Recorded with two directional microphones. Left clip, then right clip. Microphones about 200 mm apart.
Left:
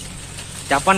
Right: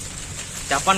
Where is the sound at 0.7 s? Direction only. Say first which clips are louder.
Left 3 dB; 15° left (ahead or behind).